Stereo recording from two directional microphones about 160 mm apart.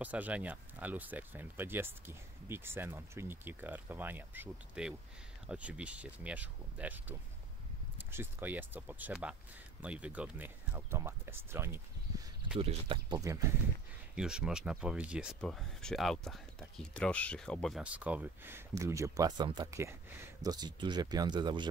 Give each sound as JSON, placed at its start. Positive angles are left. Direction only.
{"t": 0.0, "sound": "speech", "side_deg": -10}
{"t": 12.5, "sound": "speech", "side_deg": -35}
{"t": 13.2, "sound": "speech", "side_deg": -20}
{"t": 14.1, "sound": "speech", "side_deg": -5}